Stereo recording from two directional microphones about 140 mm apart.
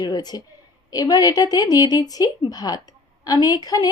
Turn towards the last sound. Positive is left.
turn(degrees=25)  # may be behind; listen again after turning